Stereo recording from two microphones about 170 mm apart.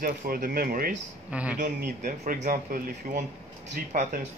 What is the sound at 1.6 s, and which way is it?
Speech, 55° right (ahead or behind).